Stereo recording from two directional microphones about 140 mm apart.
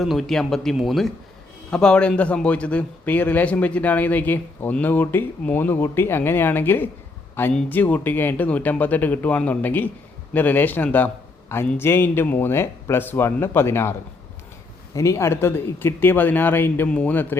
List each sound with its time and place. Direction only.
0.0 s a man's voice: centre (ahead or behind); by 13.9 s 20° left (ahead or behind)
14.9 s a man's voice: 20° left (ahead or behind)